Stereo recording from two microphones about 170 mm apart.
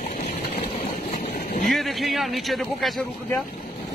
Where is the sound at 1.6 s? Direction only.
Centre (ahead or behind).